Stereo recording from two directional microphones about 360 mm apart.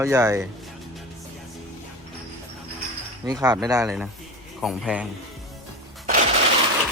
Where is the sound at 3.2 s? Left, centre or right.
Centre.